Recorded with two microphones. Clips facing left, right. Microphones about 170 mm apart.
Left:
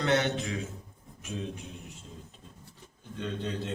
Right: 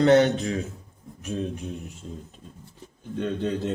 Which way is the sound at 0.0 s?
40° right (ahead or behind).